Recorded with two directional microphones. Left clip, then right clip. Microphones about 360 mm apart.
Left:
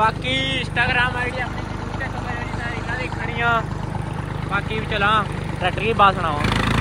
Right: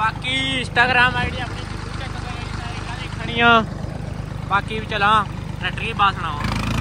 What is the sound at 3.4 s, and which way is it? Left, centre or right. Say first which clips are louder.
Speech: right 6 dB; right.